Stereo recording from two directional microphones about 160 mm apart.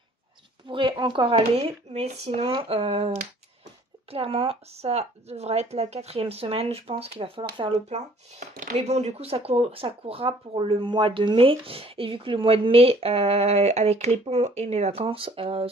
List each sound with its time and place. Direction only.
0.7 s speech: 30° right (ahead or behind)
4.1 s speech: 35° right (ahead or behind)